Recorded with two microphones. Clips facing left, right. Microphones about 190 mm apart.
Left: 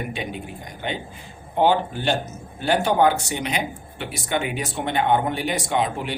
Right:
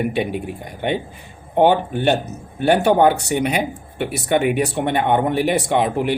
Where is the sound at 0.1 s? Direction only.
60° right (ahead or behind).